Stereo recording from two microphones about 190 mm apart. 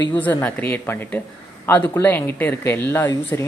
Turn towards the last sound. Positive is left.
turn(degrees=10)  # may be behind; listen again after turning